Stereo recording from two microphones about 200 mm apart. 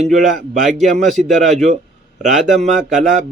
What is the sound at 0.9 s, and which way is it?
A man's voice, 40° right (ahead or behind).